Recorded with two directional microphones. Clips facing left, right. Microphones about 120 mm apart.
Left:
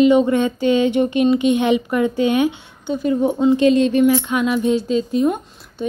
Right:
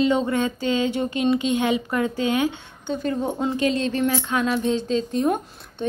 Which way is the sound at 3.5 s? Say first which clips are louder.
Left 10 dB; 20° left (ahead or behind).